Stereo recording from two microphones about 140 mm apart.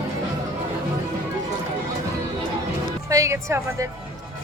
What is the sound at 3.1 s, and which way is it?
Speech, 25° right (ahead or behind).